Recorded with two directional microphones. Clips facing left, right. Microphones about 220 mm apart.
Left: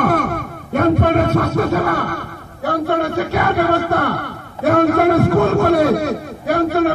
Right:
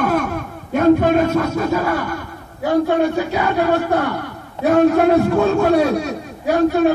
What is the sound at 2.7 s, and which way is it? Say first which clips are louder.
Speech: right 3 dB; 65° left (ahead or behind).